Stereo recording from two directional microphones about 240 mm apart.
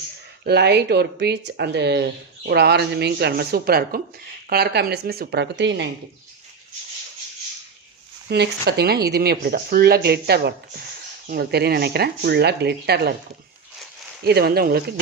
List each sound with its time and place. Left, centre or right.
0.4 s speech: right
8.3 s speech: right
14.3 s speech: right